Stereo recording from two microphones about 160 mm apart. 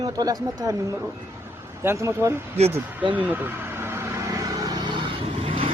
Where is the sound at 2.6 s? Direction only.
40° right (ahead or behind).